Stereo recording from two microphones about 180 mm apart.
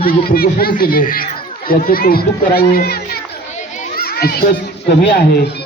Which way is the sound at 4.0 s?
60° left (ahead or behind).